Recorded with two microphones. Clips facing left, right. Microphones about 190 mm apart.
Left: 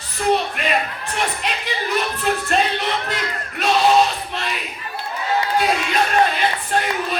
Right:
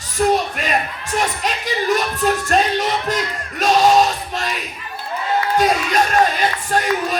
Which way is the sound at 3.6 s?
45° right (ahead or behind).